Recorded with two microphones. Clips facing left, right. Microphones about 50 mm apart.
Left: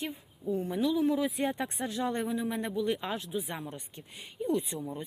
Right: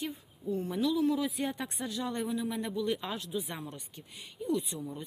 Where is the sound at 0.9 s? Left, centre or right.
Left.